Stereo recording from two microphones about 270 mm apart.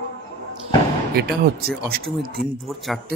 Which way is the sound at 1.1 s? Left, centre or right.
Right.